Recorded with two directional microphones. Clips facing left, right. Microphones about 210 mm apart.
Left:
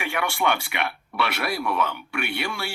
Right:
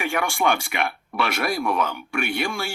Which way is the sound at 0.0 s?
40° right (ahead or behind).